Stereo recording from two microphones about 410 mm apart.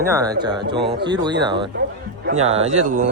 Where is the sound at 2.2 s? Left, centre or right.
Right.